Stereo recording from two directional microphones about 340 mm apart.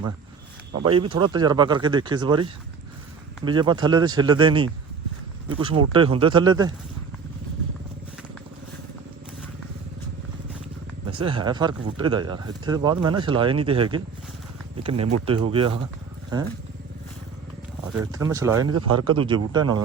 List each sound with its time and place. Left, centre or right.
0.7 s speech: centre
11.0 s speech: centre
18.0 s speech: centre
18.6 s speech: right
19.0 s speech: centre